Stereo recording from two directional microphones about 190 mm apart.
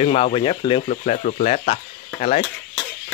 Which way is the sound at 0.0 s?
30° left (ahead or behind).